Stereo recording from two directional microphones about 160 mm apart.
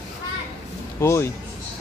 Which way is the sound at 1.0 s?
20° left (ahead or behind).